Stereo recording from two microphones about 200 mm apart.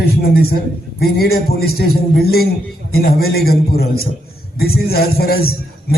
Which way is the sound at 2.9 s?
50° left (ahead or behind).